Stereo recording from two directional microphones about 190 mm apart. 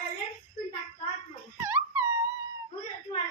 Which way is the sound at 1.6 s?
10° right (ahead or behind).